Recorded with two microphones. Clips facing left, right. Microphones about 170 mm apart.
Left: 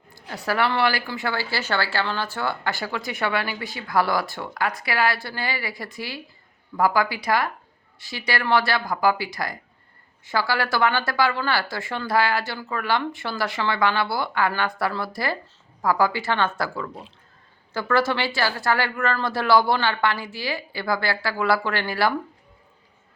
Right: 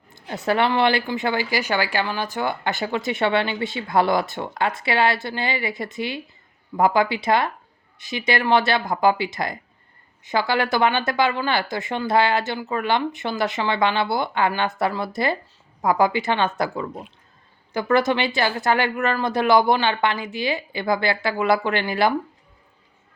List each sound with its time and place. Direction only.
0.1 s a woman's voice: 20° right (ahead or behind)